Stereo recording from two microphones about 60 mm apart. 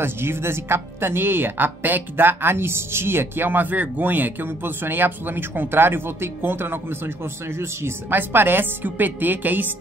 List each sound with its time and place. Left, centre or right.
0.0 s speech: right